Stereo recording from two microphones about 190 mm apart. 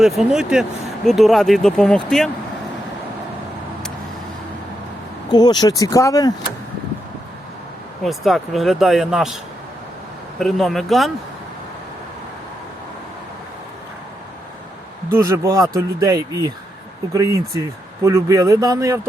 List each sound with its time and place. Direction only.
0.0 s speech: 5° right (ahead or behind)
5.3 s speech: 20° left (ahead or behind)
8.0 s speech: centre (ahead or behind)
15.3 s speech: 15° right (ahead or behind)